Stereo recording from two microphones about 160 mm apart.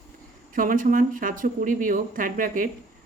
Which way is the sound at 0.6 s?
55° right (ahead or behind).